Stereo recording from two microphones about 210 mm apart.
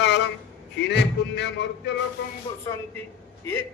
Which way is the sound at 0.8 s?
55° left (ahead or behind).